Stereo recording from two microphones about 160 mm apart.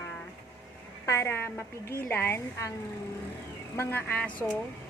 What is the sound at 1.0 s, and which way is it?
Speech, 15° left (ahead or behind).